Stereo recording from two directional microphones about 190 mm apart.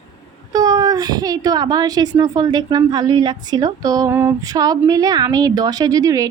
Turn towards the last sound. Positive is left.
turn(degrees=-20)  # may be behind; listen again after turning